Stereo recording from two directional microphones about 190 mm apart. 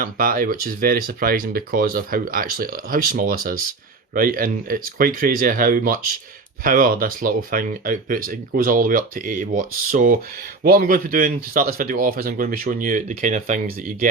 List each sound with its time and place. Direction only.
0.0 s speech: 50° right (ahead or behind)